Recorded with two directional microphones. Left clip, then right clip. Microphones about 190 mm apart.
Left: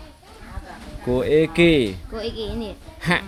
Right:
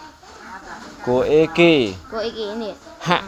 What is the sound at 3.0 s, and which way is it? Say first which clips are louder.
Speech: right 3 dB; 50° left (ahead or behind).